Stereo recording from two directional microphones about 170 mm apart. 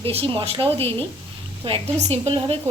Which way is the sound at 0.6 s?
10° left (ahead or behind).